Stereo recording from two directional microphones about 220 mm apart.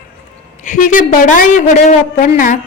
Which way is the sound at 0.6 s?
35° left (ahead or behind).